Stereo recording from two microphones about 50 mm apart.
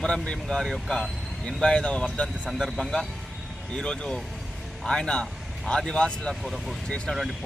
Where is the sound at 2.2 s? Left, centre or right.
Centre.